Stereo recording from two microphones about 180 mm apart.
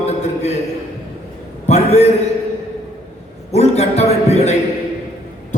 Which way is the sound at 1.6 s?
40° left (ahead or behind).